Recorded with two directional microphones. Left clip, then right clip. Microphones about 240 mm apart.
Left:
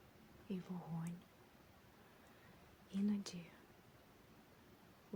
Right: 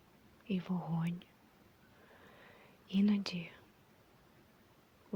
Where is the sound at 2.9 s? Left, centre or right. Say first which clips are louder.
Right 9 dB; right.